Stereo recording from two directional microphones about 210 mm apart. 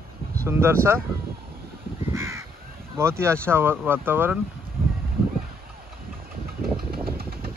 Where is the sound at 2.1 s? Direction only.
15° right (ahead or behind).